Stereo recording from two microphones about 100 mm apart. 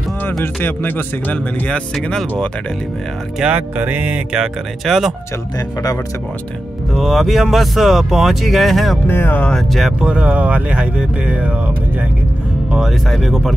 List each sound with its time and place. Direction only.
0.4 s speech: 20° left (ahead or behind)
2.0 s speech: 5° left (ahead or behind)
3.3 s speech: 15° right (ahead or behind)
6.9 s speech: centre (ahead or behind)
9.0 s speech: 20° left (ahead or behind)
9.5 s speech: centre (ahead or behind)
10.0 s speech: 10° right (ahead or behind)
12.7 s speech: centre (ahead or behind)